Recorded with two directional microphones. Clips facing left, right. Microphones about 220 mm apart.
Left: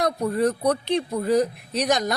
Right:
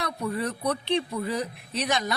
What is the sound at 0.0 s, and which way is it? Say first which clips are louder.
A woman's voice: left 8 dB; 45° left (ahead or behind).